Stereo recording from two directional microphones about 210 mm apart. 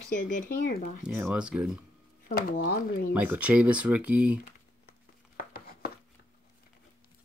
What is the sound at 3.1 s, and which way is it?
Speech, 5° right (ahead or behind).